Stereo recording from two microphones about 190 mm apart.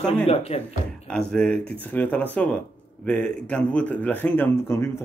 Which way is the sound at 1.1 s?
5° left (ahead or behind).